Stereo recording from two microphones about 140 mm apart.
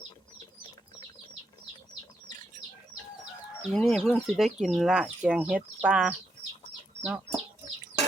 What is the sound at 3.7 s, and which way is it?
Speech, 5° left (ahead or behind).